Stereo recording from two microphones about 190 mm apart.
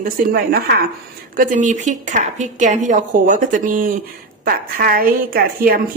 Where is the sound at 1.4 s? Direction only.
40° right (ahead or behind).